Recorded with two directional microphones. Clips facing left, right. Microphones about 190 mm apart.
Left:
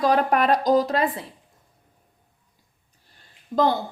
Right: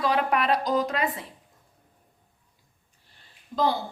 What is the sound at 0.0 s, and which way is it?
Speech, 45° left (ahead or behind).